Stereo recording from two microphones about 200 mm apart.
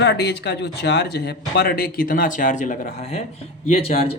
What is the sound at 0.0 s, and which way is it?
Speech, 55° left (ahead or behind).